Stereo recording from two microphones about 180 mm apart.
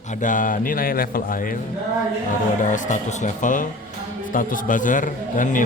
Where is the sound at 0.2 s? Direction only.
45° left (ahead or behind).